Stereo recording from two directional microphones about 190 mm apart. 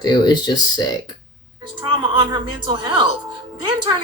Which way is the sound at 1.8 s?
25° right (ahead or behind).